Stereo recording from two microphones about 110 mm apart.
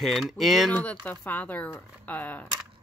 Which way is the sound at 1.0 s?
15° left (ahead or behind).